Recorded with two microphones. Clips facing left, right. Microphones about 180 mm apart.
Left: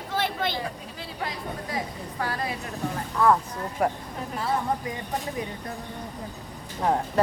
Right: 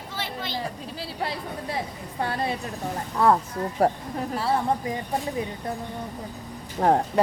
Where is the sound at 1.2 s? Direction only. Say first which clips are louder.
Right 1 dB; 30° right (ahead or behind).